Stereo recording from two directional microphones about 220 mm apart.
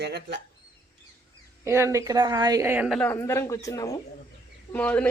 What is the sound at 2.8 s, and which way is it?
Speech, centre (ahead or behind).